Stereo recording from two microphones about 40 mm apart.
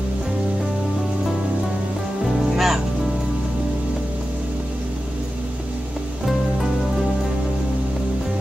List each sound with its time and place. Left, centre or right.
2.5 s music: centre